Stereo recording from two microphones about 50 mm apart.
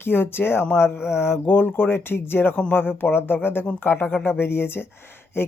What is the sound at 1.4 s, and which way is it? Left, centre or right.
Speech, left.